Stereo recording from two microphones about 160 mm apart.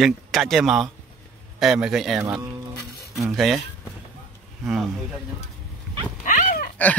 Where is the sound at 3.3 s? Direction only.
Centre (ahead or behind).